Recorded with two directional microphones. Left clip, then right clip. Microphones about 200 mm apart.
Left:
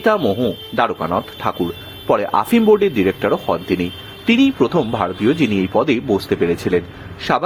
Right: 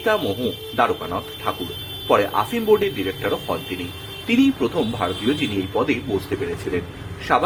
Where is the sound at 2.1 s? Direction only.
40° left (ahead or behind).